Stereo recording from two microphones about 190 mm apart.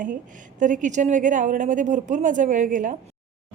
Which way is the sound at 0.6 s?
40° right (ahead or behind).